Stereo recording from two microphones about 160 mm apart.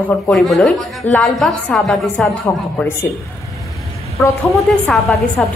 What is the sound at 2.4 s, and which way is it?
Speech, 15° left (ahead or behind).